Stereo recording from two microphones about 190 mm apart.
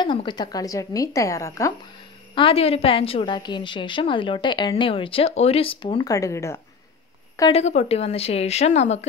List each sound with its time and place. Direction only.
0.0 s a woman's voice: 25° left (ahead or behind)
2.3 s a woman's voice: 30° left (ahead or behind); by 6.6 s 15° left (ahead or behind)
7.5 s a woman's voice: 35° left (ahead or behind)